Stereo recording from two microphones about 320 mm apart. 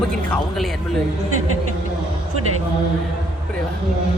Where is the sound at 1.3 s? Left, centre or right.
Right.